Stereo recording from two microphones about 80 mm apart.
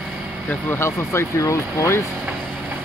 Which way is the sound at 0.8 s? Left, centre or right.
Left.